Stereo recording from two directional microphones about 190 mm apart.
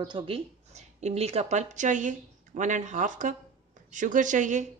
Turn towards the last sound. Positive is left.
turn(degrees=-40)  # may be behind; listen again after turning